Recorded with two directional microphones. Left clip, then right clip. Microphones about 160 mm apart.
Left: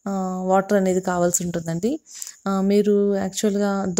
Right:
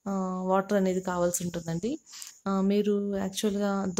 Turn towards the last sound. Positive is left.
turn(degrees=25)  # may be behind; listen again after turning